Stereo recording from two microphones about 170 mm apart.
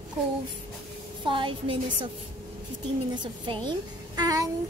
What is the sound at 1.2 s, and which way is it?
Speech, 30° right (ahead or behind).